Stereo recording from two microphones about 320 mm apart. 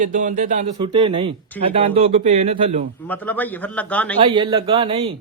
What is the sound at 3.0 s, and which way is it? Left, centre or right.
A man's voice, centre.